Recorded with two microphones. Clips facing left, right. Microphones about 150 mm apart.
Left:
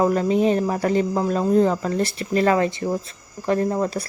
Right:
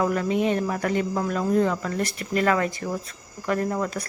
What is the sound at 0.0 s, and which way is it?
Speech, 30° left (ahead or behind).